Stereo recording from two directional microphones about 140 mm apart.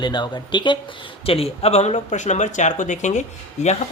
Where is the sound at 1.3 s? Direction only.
45° left (ahead or behind).